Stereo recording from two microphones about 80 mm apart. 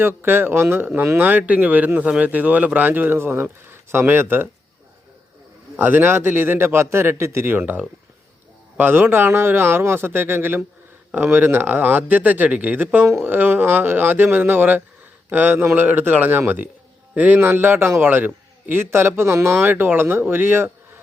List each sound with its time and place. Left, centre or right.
0.0 s speech: right
5.8 s speech: right